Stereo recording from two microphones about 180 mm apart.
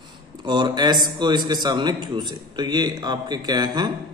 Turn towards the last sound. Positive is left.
turn(degrees=-25)  # may be behind; listen again after turning